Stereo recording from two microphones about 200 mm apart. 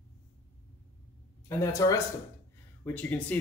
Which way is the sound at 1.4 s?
15° left (ahead or behind).